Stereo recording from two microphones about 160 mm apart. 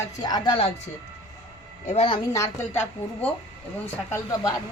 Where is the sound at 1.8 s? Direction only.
40° left (ahead or behind).